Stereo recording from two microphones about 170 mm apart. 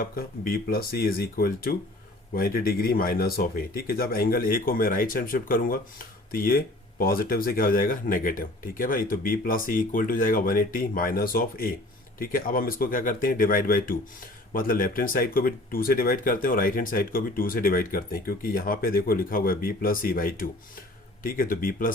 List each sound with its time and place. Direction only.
0.0 s speech: 60° left (ahead or behind)